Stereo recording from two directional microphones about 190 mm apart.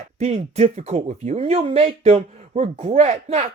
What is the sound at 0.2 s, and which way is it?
Speech, 35° right (ahead or behind).